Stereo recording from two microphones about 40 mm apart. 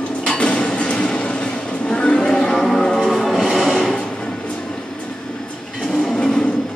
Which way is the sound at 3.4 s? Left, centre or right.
Centre.